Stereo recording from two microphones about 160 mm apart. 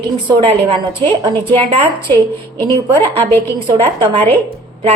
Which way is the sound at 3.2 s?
15° left (ahead or behind).